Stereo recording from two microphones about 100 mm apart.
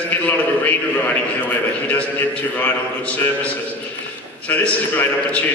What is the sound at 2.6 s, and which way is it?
A man's voice, 15° left (ahead or behind).